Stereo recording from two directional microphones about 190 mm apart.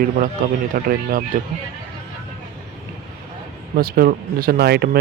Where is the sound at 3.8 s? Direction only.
50° right (ahead or behind).